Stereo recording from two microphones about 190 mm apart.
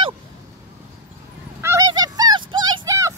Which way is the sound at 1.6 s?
15° right (ahead or behind).